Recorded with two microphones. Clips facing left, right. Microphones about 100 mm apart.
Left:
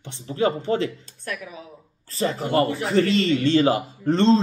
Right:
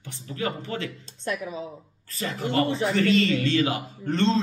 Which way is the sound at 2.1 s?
30° left (ahead or behind).